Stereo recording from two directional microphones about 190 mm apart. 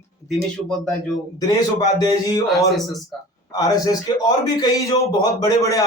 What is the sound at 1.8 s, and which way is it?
A man's voice, 20° left (ahead or behind).